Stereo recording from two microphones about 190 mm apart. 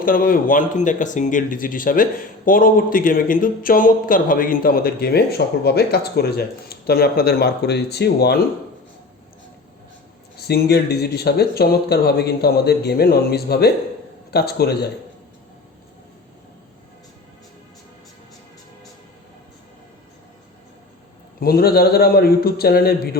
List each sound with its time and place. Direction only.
0.0 s speech: 45° left (ahead or behind)
10.3 s speech: 55° left (ahead or behind)
21.4 s speech: 55° left (ahead or behind)